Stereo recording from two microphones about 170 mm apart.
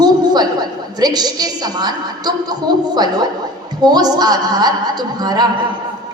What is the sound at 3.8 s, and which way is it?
A woman's voice, 25° right (ahead or behind).